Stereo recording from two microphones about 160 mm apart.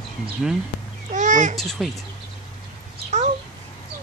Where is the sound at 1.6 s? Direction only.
Centre (ahead or behind).